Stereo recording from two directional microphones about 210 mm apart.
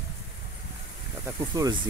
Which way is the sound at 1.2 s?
15° right (ahead or behind).